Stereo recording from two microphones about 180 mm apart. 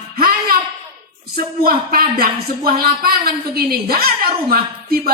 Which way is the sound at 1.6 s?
55° right (ahead or behind).